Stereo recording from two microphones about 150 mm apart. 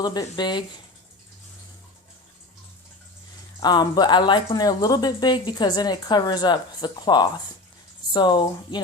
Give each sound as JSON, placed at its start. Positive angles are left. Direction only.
{"t": 0.0, "sound": "speech", "side_deg": 25}
{"t": 3.6, "sound": "speech", "side_deg": 30}